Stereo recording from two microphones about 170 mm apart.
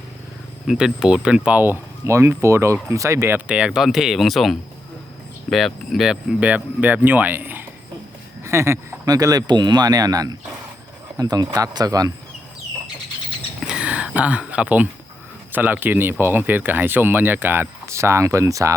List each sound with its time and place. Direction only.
0.7 s speech: 5° right (ahead or behind); by 12.1 s 20° right (ahead or behind)
13.7 s a sound: 5° right (ahead or behind)
15.5 s speech: 10° right (ahead or behind)